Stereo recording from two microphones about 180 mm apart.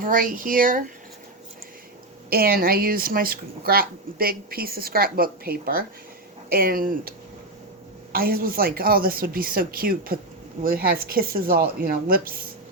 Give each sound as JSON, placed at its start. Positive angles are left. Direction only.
{"t": 0.0, "sound": "speech", "side_deg": -50}
{"t": 2.3, "sound": "speech", "side_deg": -55}
{"t": 8.1, "sound": "speech", "side_deg": -55}